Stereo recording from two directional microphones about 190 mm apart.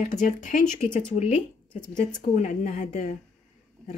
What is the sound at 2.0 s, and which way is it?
Speech, 40° left (ahead or behind).